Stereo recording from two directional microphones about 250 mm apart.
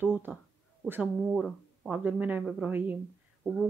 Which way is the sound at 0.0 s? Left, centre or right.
Centre.